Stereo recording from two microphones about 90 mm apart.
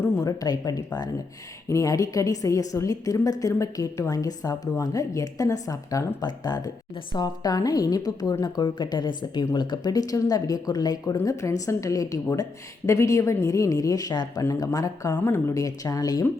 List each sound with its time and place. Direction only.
0.2 s a woman's voice: 40° left (ahead or behind)
6.1 s speech: 50° left (ahead or behind)
11.2 s a woman's voice: 35° left (ahead or behind)